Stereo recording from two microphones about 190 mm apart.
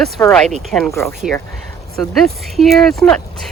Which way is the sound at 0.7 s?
Centre (ahead or behind).